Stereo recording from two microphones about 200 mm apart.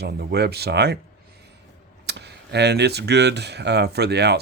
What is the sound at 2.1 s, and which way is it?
Speech, 55° right (ahead or behind).